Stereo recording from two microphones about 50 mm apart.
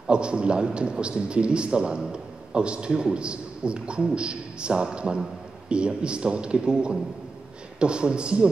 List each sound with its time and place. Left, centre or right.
0.0 s a man's voice: centre